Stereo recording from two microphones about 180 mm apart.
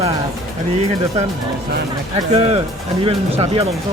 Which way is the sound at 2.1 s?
35° right (ahead or behind).